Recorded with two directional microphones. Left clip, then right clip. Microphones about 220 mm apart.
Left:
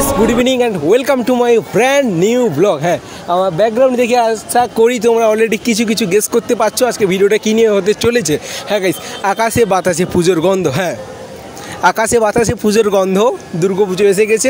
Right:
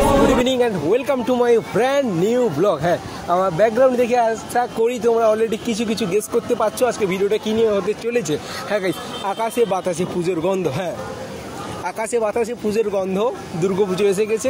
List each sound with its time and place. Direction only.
0.4 s speech: 45° left (ahead or behind)